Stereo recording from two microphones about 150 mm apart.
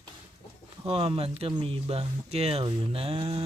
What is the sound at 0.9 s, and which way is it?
Speech, 40° right (ahead or behind).